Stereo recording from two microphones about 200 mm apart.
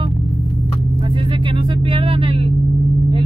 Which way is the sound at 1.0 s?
25° right (ahead or behind).